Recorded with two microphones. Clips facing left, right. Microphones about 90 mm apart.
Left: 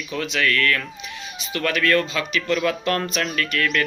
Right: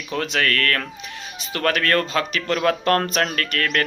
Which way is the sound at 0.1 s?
45° right (ahead or behind).